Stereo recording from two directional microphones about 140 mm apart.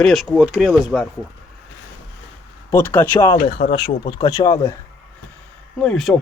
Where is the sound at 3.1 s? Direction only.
35° left (ahead or behind).